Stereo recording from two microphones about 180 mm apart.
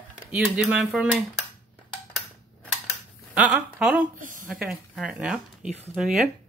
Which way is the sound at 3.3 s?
5° right (ahead or behind).